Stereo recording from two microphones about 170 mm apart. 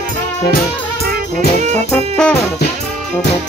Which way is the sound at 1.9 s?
5° left (ahead or behind).